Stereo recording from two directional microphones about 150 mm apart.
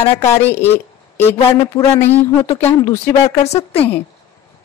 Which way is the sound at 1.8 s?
15° left (ahead or behind).